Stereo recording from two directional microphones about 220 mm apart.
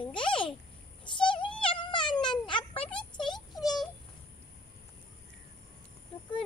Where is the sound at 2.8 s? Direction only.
5° left (ahead or behind).